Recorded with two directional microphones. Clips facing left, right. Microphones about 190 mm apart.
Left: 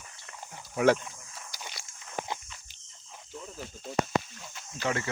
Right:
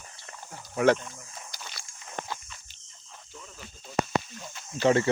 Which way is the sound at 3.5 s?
55° left (ahead or behind).